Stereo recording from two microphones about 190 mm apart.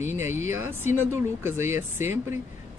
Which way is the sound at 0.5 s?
15° right (ahead or behind).